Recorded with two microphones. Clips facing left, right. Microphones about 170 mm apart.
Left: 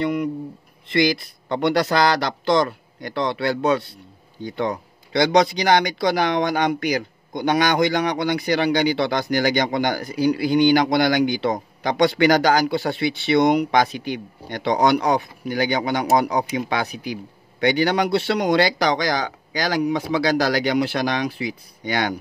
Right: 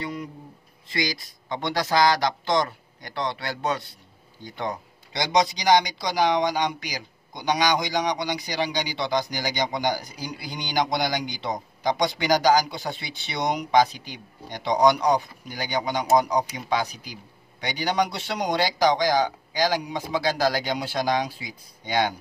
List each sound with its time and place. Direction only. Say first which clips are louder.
0.0 s speech: left 10 dB; 65° left (ahead or behind)